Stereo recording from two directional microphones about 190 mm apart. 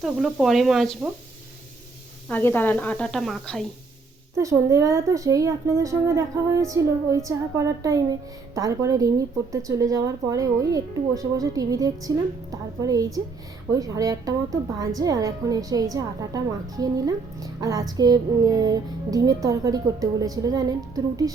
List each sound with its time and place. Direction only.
0.0 s speech: centre (ahead or behind)
2.3 s speech: 10° left (ahead or behind)
4.4 s a woman's voice: 15° right (ahead or behind)